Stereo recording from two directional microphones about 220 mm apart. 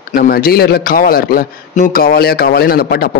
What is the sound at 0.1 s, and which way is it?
A man's voice, 40° left (ahead or behind).